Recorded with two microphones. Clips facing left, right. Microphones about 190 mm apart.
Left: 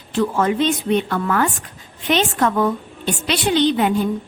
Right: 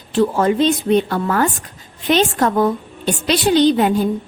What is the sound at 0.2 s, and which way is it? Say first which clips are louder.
A woman's voice: right 3 dB; 35° right (ahead or behind).